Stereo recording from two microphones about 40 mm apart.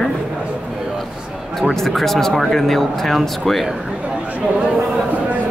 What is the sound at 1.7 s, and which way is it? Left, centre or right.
Speech, centre.